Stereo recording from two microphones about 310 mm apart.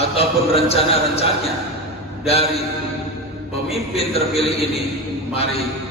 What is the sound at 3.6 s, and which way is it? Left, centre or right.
A man's voice, centre.